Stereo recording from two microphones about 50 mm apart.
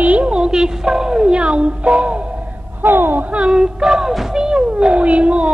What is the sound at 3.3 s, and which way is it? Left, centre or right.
Speech, centre.